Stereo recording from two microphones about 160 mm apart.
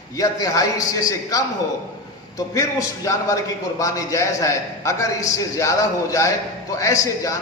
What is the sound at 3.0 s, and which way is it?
A man's voice, 20° left (ahead or behind).